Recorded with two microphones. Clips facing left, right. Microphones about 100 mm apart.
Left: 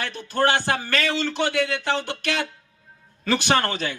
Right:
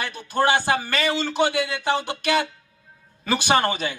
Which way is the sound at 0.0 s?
15° right (ahead or behind).